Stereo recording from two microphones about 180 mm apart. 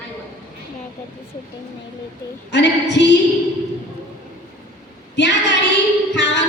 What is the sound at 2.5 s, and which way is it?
Speech, 70° left (ahead or behind).